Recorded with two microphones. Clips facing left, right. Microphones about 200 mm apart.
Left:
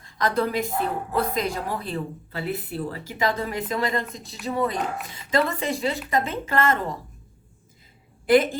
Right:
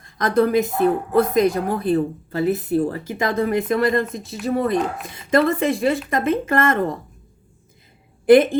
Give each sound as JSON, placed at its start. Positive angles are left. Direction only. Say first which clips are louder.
{"t": 0.0, "sound": "speech", "louder": "right 6 dB", "side_deg": -50}